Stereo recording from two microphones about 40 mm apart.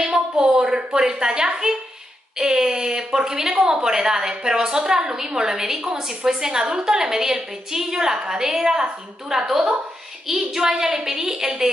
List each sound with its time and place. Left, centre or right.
0.0 s speech: right